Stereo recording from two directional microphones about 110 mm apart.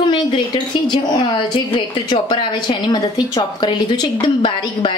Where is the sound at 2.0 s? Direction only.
45° left (ahead or behind).